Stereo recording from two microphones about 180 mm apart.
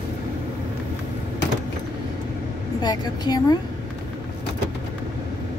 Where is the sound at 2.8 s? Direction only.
20° left (ahead or behind).